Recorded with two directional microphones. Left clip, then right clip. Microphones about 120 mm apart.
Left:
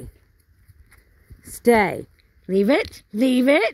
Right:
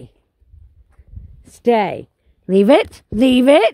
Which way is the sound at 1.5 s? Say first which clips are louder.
Right 2 dB; 25° right (ahead or behind).